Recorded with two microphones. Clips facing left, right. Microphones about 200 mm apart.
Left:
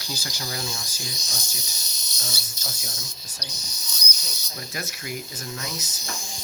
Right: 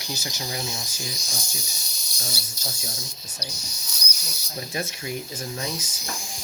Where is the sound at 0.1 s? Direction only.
20° right (ahead or behind).